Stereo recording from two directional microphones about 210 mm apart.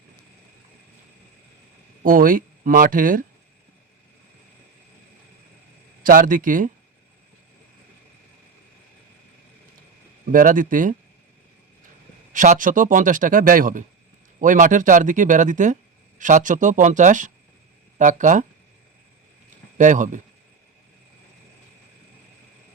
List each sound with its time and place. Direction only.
2.0 s speech: 40° right (ahead or behind)
6.0 s speech: 40° right (ahead or behind)
10.3 s speech: 40° right (ahead or behind)
12.3 s speech: 40° right (ahead or behind)
19.8 s speech: 40° right (ahead or behind)